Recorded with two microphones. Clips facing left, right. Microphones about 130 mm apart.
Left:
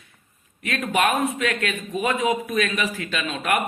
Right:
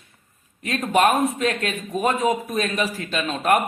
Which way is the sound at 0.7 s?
40° right (ahead or behind).